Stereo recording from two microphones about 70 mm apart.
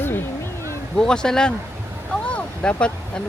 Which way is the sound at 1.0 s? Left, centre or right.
Centre.